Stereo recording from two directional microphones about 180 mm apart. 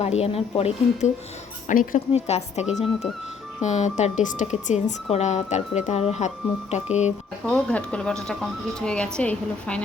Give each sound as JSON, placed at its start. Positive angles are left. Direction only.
{"t": 0.0, "sound": "speech", "side_deg": 35}
{"t": 1.6, "sound": "speech", "side_deg": 50}
{"t": 7.4, "sound": "speech", "side_deg": 5}